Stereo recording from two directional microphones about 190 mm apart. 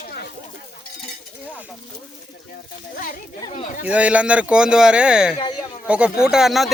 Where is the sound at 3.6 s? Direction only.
40° left (ahead or behind).